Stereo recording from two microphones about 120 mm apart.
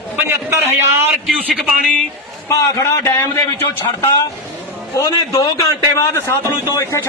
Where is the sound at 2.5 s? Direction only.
30° left (ahead or behind).